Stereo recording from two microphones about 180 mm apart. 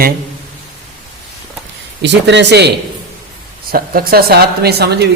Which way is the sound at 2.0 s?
80° right.